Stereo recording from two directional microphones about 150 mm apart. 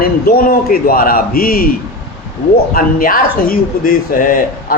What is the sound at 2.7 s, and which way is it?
A man's voice, 70° left (ahead or behind).